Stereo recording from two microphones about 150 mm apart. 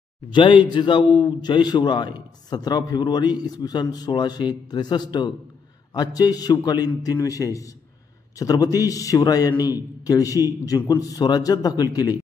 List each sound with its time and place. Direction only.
0.3 s a man's voice: 35° left (ahead or behind)